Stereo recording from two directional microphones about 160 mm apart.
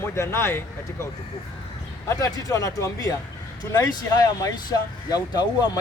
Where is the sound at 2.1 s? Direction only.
20° left (ahead or behind).